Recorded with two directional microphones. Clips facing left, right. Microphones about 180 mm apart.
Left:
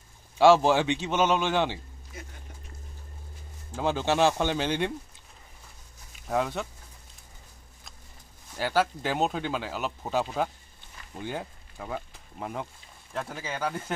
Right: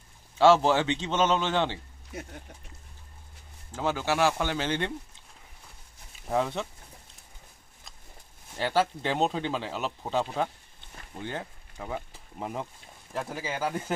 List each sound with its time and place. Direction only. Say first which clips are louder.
0.4 s a man's voice: left 1 dB; 10° left (ahead or behind)
3.7 s a man's voice: left 2 dB; 20° left (ahead or behind)
6.2 s speech: even; centre (ahead or behind)
8.5 s speech: even; centre (ahead or behind)
11.8 s speech: even; 5° right (ahead or behind)